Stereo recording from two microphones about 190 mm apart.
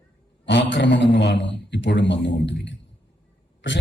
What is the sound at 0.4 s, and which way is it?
A man's voice, 65° left (ahead or behind).